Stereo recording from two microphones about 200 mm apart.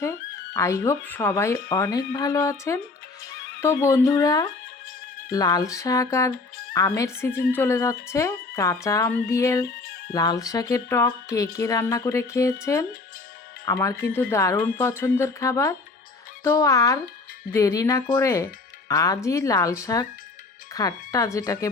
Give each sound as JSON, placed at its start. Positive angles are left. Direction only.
{"t": 0.0, "sound": "speech", "side_deg": 15}